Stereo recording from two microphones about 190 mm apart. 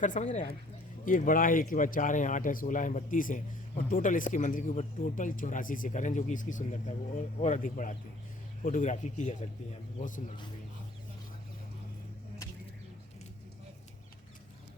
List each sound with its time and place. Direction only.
0.0 s speech: 40° left (ahead or behind)